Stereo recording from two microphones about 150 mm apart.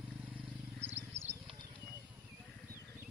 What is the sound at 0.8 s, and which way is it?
Wild animals, 45° right (ahead or behind).